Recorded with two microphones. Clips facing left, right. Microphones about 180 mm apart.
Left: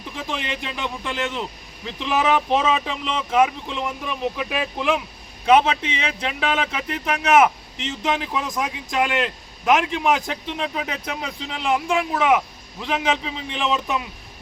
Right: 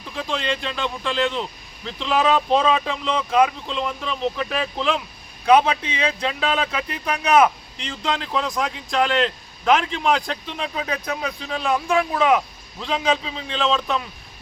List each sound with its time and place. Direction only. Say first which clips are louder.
0.0 s speech: right 3 dB; 20° left (ahead or behind)
5.5 s speech: even; 25° left (ahead or behind)